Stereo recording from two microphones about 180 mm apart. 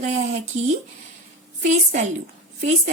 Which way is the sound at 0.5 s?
40° right (ahead or behind).